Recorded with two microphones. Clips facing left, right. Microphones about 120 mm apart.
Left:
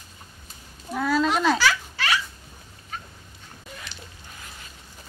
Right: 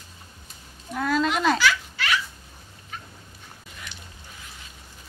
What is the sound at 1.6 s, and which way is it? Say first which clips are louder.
Baby laughter: even; 35° left (ahead or behind).